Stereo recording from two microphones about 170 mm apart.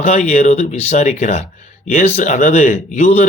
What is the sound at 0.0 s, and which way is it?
A man's voice, 40° left (ahead or behind).